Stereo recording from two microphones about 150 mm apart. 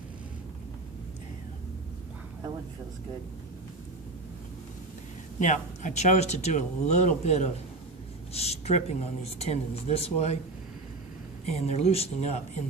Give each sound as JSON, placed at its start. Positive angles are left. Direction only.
{"t": 5.4, "sound": "speech", "side_deg": 55}
{"t": 11.4, "sound": "speech", "side_deg": 45}